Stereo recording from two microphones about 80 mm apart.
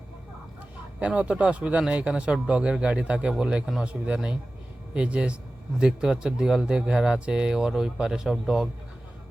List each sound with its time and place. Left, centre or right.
0.9 s speech: centre